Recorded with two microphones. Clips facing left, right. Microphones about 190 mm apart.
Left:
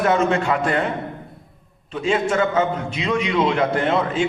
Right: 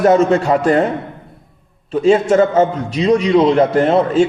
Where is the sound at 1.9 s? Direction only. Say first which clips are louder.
Right 9 dB; 40° right (ahead or behind).